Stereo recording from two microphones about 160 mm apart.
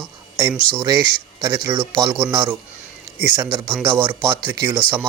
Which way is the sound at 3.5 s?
30° right (ahead or behind).